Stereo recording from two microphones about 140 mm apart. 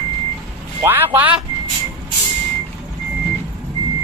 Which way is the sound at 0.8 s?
15° right (ahead or behind).